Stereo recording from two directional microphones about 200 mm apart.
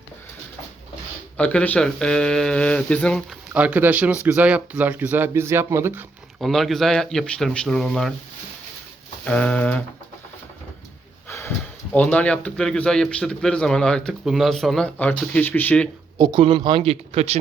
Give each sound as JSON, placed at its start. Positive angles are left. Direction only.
{"t": 1.4, "sound": "speech", "side_deg": 5}
{"t": 6.4, "sound": "speech", "side_deg": 0}
{"t": 9.2, "sound": "speech", "side_deg": 5}
{"t": 11.3, "sound": "snort", "side_deg": 15}
{"t": 11.9, "sound": "speech", "side_deg": 5}
{"t": 16.1, "sound": "speech", "side_deg": -20}